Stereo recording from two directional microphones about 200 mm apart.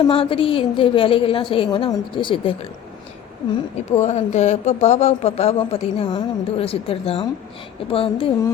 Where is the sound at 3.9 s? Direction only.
35° left (ahead or behind).